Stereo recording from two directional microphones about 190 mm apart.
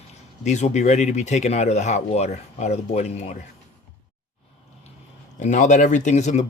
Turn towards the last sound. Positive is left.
turn(degrees=40)  # may be behind; listen again after turning